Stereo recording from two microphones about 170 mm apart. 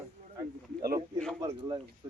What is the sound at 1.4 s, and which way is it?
Speech, 20° right (ahead or behind).